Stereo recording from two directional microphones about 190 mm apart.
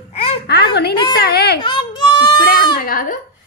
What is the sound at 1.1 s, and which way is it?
Speech, 60° left (ahead or behind).